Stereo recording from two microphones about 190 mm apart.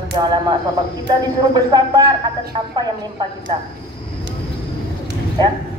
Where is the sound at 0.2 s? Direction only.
20° right (ahead or behind).